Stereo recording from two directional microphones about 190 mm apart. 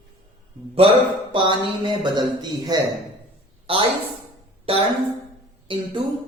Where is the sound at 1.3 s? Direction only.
25° right (ahead or behind).